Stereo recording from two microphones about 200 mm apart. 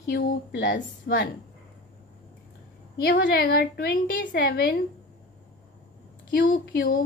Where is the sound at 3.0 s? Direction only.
55° left (ahead or behind).